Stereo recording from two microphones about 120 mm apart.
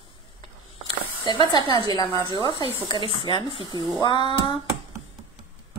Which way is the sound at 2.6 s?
50° right (ahead or behind).